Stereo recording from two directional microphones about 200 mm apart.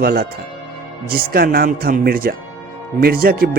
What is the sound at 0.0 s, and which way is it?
Speech, 50° right (ahead or behind).